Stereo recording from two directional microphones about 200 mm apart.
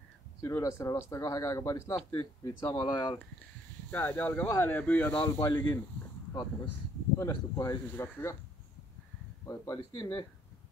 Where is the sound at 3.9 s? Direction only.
10° left (ahead or behind).